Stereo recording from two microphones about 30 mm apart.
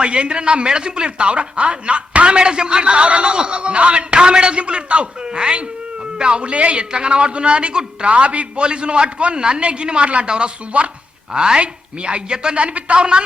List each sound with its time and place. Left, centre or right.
0.0 s speech: right
2.8 s speech: right
6.9 s a man's voice: right
8.6 s a man's voice: right
11.3 s a man's voice: right
12.5 s speech: right